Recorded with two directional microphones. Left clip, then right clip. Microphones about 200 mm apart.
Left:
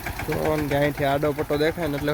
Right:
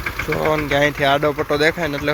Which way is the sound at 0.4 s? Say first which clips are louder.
Right 6 dB; 5° left (ahead or behind).